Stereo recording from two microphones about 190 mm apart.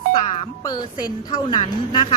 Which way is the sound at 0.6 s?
20° left (ahead or behind).